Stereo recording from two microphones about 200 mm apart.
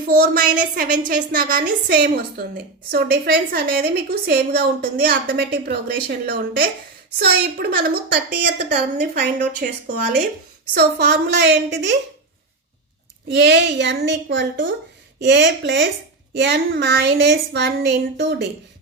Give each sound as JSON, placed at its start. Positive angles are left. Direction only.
{"t": 0.1, "sound": "a woman's voice", "side_deg": -45}
{"t": 2.9, "sound": "a woman's voice", "side_deg": -55}
{"t": 13.2, "sound": "a woman's voice", "side_deg": -65}